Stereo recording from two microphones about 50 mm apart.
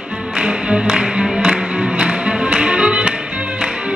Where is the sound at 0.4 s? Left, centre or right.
Centre.